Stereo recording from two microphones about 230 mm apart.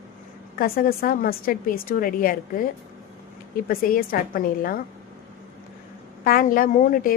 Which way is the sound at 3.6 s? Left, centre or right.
Left.